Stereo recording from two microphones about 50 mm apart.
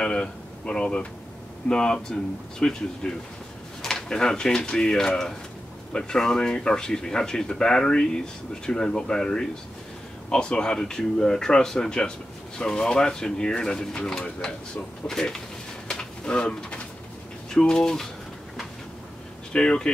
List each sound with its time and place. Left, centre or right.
0.0 s speech: centre
15.9 s a sound: centre
17.6 s speech: centre
19.5 s speech: centre